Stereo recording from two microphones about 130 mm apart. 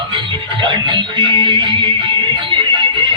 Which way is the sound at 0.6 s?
40° right (ahead or behind).